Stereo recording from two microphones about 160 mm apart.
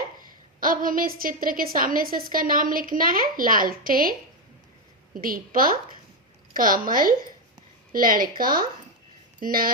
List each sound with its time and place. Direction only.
0.6 s a woman's voice: 60° right (ahead or behind)
5.1 s a woman's voice: 60° right (ahead or behind)